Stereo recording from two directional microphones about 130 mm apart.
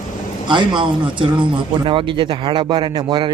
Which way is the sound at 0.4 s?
40° right (ahead or behind).